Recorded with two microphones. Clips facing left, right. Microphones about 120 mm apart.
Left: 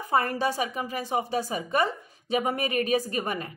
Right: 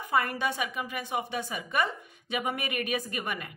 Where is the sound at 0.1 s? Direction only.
35° left (ahead or behind).